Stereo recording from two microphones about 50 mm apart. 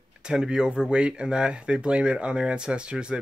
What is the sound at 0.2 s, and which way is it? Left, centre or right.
Speech, centre.